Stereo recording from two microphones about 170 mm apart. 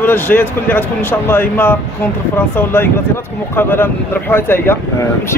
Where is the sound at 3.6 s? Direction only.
15° left (ahead or behind).